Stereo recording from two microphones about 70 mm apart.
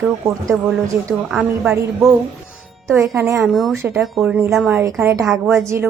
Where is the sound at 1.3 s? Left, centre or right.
Centre.